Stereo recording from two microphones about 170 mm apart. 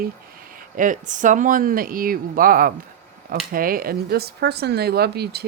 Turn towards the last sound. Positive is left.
turn(degrees=-70)  # may be behind; listen again after turning